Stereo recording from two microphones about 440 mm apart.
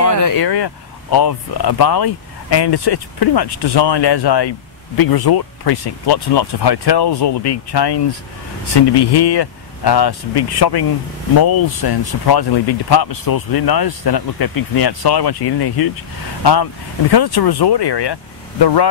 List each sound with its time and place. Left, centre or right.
0.1 s speech: left
11.6 s speech: left
17.1 s speech: left